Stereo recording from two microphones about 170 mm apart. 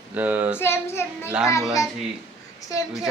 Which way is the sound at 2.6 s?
20° left (ahead or behind).